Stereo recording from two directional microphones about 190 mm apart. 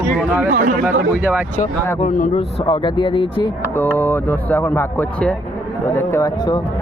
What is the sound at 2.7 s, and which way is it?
Speech, 25° left (ahead or behind).